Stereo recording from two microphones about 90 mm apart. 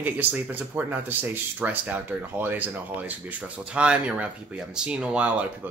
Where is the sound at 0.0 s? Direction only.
20° right (ahead or behind).